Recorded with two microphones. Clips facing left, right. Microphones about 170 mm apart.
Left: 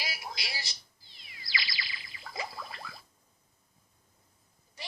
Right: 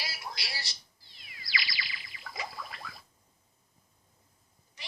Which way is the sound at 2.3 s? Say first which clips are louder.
Left 1 dB; 30° left (ahead or behind).